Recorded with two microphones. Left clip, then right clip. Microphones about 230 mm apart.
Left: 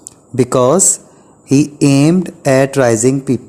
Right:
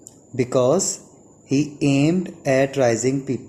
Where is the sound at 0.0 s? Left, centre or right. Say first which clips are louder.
Left 9 dB; left.